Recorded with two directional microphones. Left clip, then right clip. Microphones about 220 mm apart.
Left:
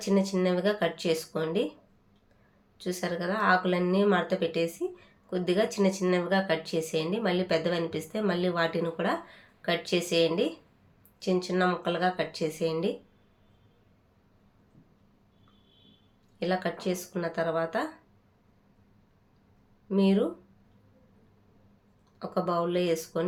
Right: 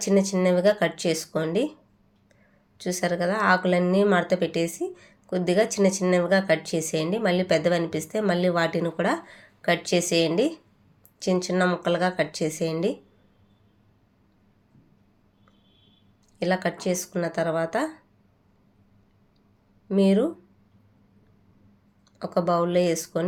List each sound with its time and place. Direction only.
0.0 s speech: 30° right (ahead or behind)
2.7 s speech: 30° right (ahead or behind)
16.4 s speech: 30° right (ahead or behind)
19.9 s speech: 30° right (ahead or behind)
22.2 s speech: 30° right (ahead or behind)